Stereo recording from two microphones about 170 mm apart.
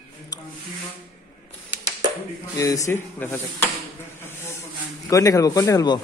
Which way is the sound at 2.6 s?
20° left (ahead or behind).